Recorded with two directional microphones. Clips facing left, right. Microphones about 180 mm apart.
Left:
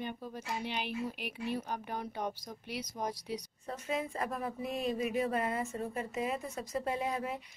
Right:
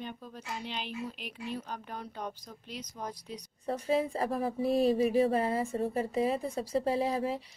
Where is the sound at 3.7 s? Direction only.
35° right (ahead or behind).